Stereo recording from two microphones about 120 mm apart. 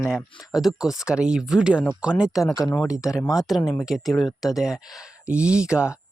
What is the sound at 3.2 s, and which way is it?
Speech, 30° left (ahead or behind).